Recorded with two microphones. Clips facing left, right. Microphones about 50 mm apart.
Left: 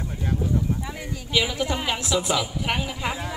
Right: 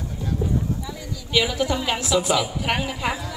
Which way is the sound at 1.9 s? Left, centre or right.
Centre.